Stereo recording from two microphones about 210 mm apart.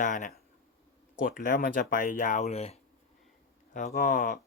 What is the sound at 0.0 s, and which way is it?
Speech, 35° left (ahead or behind).